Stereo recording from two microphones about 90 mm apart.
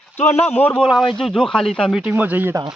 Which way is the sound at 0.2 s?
20° left (ahead or behind).